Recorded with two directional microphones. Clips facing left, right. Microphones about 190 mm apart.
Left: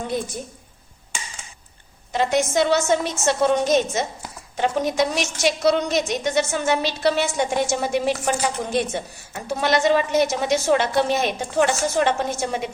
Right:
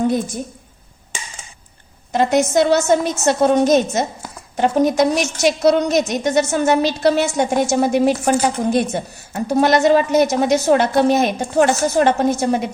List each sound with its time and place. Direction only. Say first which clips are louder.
2.1 s a woman's voice: right 5 dB; 45° right (ahead or behind)